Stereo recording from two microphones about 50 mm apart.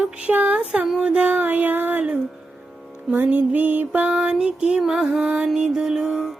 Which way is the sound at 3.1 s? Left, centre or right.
Right.